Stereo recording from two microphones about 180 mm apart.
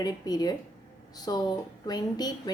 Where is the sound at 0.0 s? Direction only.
20° left (ahead or behind).